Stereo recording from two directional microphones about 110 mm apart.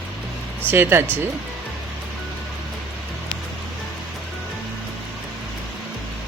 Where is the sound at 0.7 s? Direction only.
20° right (ahead or behind).